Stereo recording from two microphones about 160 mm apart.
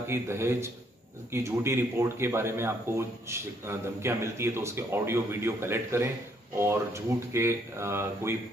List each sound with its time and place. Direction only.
0.1 s a man's voice: 15° right (ahead or behind)